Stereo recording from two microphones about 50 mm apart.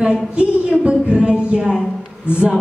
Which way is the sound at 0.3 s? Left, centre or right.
Right.